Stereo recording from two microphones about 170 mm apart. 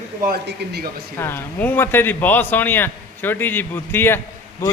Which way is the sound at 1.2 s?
15° left (ahead or behind).